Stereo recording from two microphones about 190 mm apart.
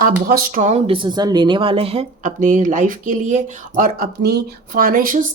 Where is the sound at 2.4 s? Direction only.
45° right (ahead or behind).